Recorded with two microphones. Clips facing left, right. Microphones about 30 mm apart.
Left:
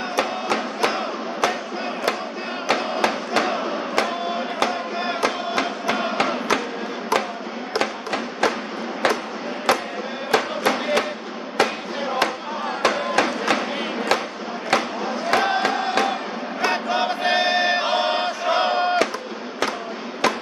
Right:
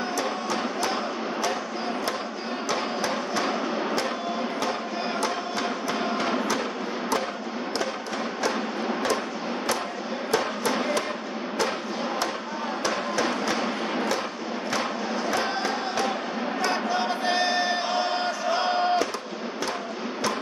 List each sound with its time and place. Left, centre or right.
0.1 s music: left
2.7 s music: left
5.2 s music: left
10.3 s music: left
12.8 s music: left
15.2 s a sound: left
16.6 s chant: left
18.7 s a sound: left